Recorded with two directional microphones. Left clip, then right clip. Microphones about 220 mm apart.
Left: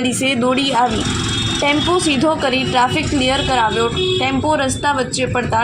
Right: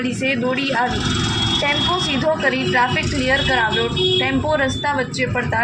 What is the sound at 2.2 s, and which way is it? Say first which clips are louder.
Speech: left 2 dB; 50° left (ahead or behind).